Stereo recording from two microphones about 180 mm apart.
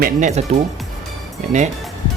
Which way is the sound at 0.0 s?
40° right (ahead or behind).